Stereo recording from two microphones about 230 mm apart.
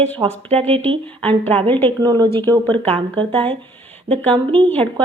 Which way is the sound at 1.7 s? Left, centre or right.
Centre.